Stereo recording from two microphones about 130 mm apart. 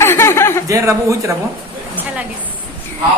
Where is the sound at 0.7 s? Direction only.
25° right (ahead or behind).